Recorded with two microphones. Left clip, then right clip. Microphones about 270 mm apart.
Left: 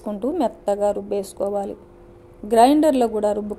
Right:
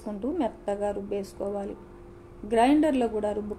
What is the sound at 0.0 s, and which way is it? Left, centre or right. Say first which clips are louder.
A woman's voice: left 7 dB; left.